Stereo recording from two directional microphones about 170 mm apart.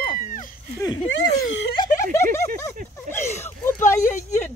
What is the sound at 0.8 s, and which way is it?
Speech, 20° left (ahead or behind).